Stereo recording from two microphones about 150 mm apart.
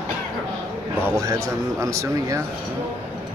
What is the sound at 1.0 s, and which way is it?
Speech, 20° right (ahead or behind).